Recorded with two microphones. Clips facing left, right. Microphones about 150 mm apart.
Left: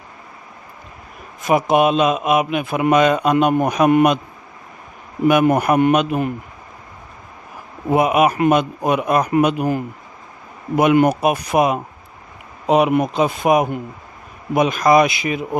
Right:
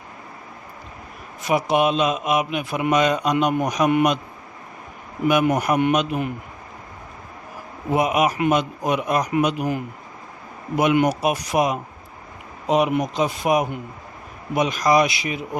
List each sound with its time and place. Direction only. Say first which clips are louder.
1.4 s a man's voice: left 4 dB; 50° left (ahead or behind)
5.3 s a man's voice: left 4 dB; 55° left (ahead or behind)
7.9 s a man's voice: left 4 dB; 55° left (ahead or behind)